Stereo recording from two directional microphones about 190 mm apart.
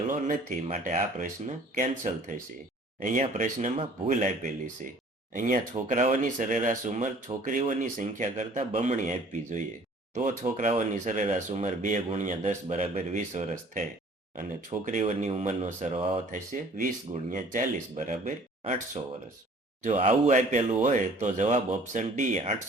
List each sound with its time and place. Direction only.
0.1 s speech: 40° right (ahead or behind)
16.3 s speech: 45° right (ahead or behind)